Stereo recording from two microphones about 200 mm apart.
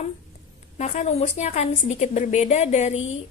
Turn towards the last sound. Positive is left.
turn(degrees=35)  # may be behind; listen again after turning